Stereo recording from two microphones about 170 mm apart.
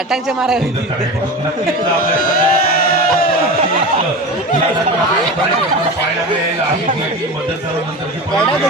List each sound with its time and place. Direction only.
0.1 s a man's voice: 5° right (ahead or behind)
2.2 s crowd: 60° left (ahead or behind)